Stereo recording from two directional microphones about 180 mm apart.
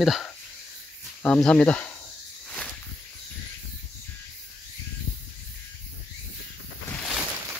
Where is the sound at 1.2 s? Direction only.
5° left (ahead or behind).